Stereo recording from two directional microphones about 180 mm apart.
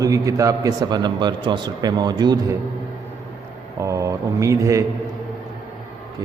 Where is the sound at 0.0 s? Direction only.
20° right (ahead or behind).